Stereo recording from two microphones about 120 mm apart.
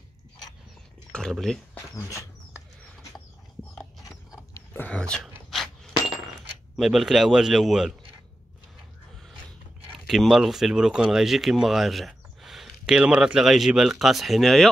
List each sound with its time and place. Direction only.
1.1 s speech: 5° left (ahead or behind)
2.0 s dog: 25° left (ahead or behind)
4.6 s a sound: 15° left (ahead or behind)
6.8 s speech: centre (ahead or behind)
10.0 s speech: centre (ahead or behind)